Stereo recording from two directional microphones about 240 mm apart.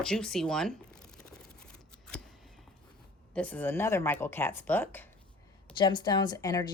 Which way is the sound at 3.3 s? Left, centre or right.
Centre.